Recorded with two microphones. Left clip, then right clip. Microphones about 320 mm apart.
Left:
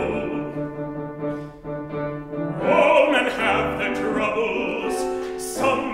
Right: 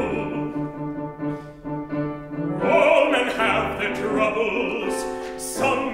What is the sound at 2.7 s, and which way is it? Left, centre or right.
Opera, centre.